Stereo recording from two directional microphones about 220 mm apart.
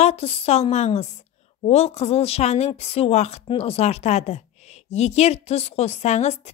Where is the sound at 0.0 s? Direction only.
25° left (ahead or behind).